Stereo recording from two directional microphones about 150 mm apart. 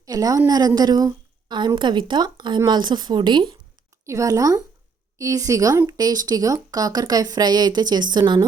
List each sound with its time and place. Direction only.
0.0 s a woman's voice: 25° right (ahead or behind)
4.0 s a woman's voice: 20° right (ahead or behind)